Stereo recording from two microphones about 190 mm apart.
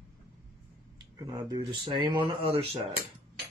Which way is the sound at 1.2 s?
20° right (ahead or behind).